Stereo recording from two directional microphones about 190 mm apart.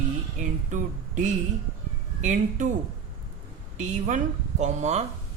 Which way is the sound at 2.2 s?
40° right (ahead or behind).